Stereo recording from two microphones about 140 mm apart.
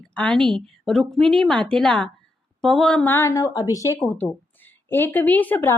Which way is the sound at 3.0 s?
20° left (ahead or behind).